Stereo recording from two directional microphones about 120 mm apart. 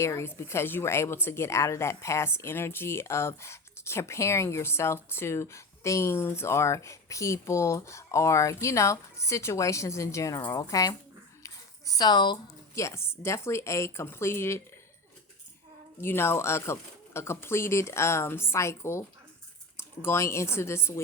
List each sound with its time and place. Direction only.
0.0 s a woman's voice: 20° left (ahead or behind)
11.4 s a sound: 30° left (ahead or behind)
12.7 s a woman's voice: 25° left (ahead or behind)
16.0 s a woman's voice: 20° left (ahead or behind)